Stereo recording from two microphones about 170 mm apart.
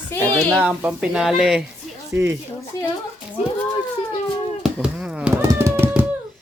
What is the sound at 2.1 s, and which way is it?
Speech, 15° right (ahead or behind).